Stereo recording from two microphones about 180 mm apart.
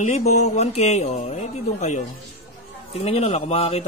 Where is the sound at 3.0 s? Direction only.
35° left (ahead or behind).